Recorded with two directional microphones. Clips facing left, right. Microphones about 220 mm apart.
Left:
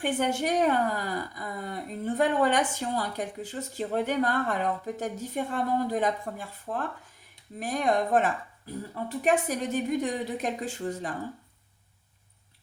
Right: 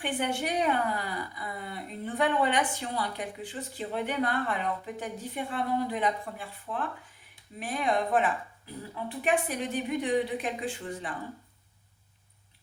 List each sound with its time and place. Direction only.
0.0 s a woman's voice: 40° left (ahead or behind)